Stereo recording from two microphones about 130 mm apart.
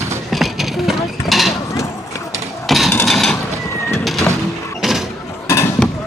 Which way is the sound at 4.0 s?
Centre (ahead or behind).